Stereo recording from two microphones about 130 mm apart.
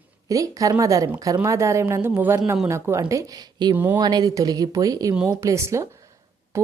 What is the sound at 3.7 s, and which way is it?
Speech, 15° right (ahead or behind).